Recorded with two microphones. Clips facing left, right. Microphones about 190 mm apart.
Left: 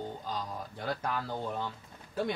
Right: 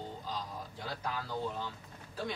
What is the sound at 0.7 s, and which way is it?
Speech, 60° left (ahead or behind).